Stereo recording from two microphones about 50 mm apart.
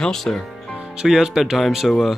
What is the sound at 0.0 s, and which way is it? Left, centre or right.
Speech, centre.